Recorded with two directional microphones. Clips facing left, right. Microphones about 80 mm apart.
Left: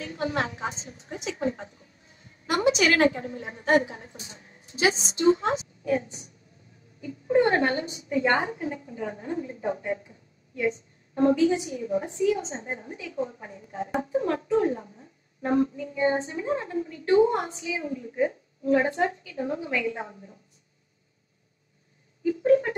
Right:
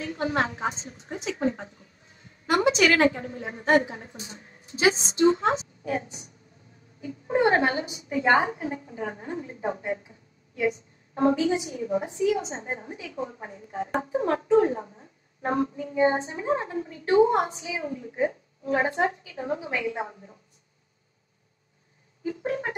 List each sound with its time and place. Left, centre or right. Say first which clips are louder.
0.0 s a woman's voice: right 2 dB; right
11.1 s speech: left 1 dB; right
22.2 s a sound: left 9 dB; right